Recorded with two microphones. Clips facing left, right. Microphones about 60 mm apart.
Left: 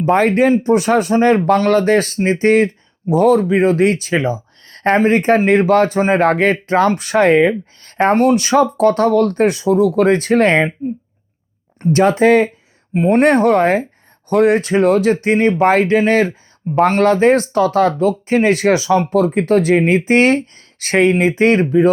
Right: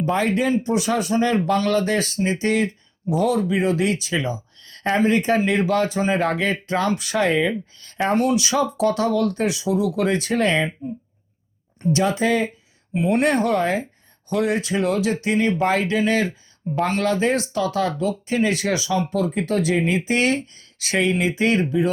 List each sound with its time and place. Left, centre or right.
0.0 s speech: left
11.8 s speech: left